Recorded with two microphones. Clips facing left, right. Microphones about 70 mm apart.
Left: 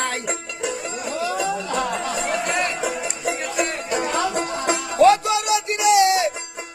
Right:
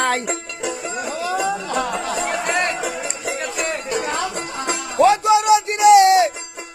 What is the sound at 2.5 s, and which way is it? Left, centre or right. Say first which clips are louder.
Music: right 2 dB; centre.